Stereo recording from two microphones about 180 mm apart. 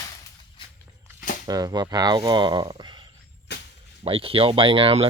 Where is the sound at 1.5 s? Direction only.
20° right (ahead or behind).